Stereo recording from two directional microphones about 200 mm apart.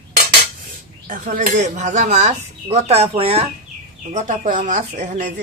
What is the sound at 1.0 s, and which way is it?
Speech, 40° right (ahead or behind).